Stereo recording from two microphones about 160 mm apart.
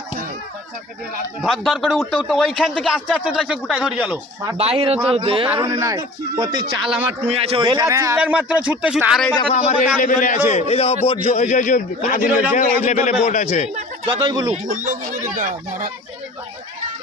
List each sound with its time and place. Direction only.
1.4 s a man's voice: centre (ahead or behind)
4.5 s speech: 40° right (ahead or behind)
5.6 s speech: 20° right (ahead or behind)
6.8 s a man's voice: 5° right (ahead or behind)
7.3 s speech: 40° right (ahead or behind); by 8.2 s 20° right (ahead or behind)
8.2 s speech: 5° right (ahead or behind)
9.5 s a man's voice: 45° left (ahead or behind)
12.3 s speech: 10° right (ahead or behind)
12.5 s a man's voice: 50° left (ahead or behind)
14.2 s speech: 25° right (ahead or behind)
14.5 s speech: 55° right (ahead or behind)